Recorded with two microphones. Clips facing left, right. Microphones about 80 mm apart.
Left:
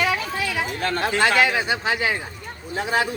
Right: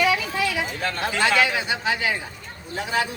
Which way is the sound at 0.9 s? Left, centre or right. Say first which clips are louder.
Left 2 dB; left.